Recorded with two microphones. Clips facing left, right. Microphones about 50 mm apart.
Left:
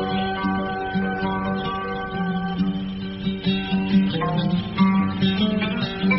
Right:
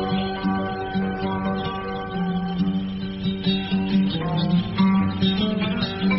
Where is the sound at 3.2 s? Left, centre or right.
Left.